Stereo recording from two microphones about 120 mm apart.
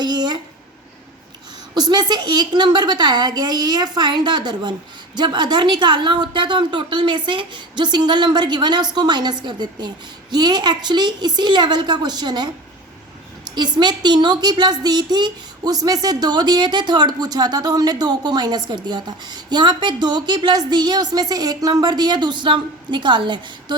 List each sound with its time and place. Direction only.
0.0 s a sound: 35° right (ahead or behind)
1.7 s a woman's voice: 35° right (ahead or behind)
13.6 s a woman's voice: 40° right (ahead or behind)